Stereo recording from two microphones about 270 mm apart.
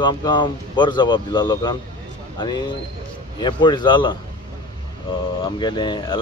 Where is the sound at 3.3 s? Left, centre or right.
Centre.